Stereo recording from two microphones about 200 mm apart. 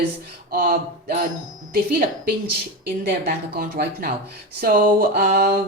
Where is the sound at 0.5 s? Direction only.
50° right (ahead or behind).